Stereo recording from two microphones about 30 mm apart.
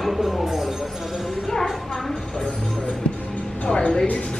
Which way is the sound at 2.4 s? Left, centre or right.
Centre.